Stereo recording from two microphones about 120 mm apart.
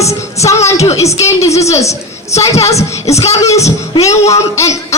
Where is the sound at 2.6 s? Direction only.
60° left (ahead or behind).